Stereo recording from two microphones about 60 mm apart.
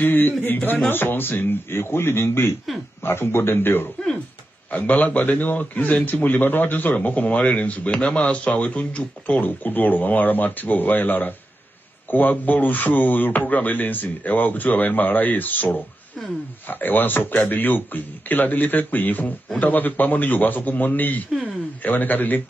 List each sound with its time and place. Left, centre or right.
0.0 s a man's voice: left